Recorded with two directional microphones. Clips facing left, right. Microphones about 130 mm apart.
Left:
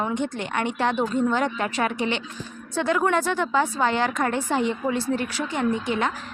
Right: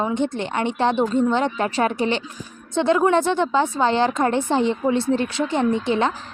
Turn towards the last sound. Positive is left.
turn(degrees=-30)  # may be behind; listen again after turning